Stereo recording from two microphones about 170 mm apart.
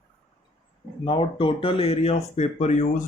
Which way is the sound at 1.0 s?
30° left (ahead or behind).